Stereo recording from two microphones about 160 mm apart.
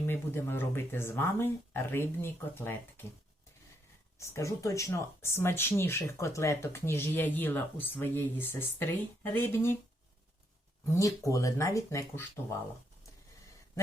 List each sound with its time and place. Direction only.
0.0 s speech: 15° left (ahead or behind)
4.2 s speech: 20° left (ahead or behind)
10.9 s speech: 20° left (ahead or behind)